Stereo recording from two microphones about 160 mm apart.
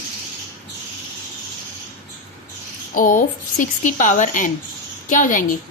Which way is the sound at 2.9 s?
60° left (ahead or behind).